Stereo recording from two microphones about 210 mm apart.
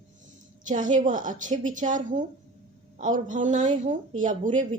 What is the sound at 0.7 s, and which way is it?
A woman's voice, 35° right (ahead or behind).